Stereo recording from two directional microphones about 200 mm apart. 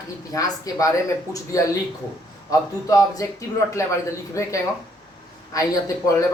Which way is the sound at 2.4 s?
20° left (ahead or behind).